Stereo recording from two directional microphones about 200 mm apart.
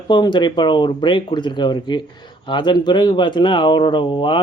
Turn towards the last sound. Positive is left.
turn(degrees=25)  # may be behind; listen again after turning